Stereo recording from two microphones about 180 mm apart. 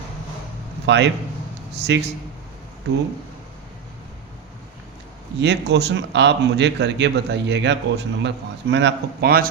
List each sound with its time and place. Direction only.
0.9 s a man's voice: 75° right (ahead or behind)
5.4 s a man's voice: 70° right (ahead or behind)